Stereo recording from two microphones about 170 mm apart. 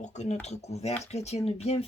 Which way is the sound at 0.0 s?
40° left (ahead or behind).